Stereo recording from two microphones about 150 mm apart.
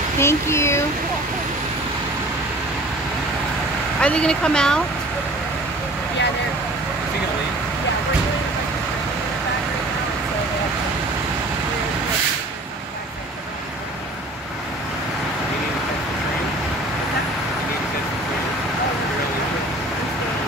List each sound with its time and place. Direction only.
0.2 s speech: 15° left (ahead or behind)
4.0 s speech: 5° left (ahead or behind)